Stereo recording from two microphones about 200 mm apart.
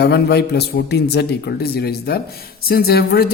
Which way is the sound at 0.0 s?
55° left (ahead or behind).